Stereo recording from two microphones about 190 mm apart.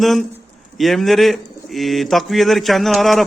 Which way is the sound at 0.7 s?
Centre (ahead or behind).